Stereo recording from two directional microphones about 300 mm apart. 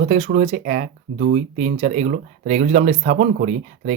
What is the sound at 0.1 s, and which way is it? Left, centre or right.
Speech, right.